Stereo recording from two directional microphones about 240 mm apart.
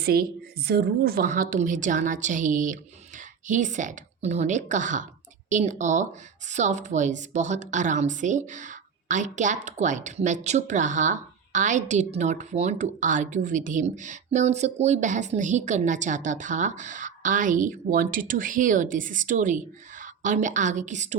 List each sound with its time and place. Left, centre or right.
0.0 s a woman's voice: right